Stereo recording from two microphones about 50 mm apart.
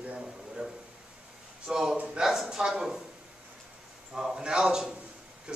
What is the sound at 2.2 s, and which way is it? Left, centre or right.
Speech, centre.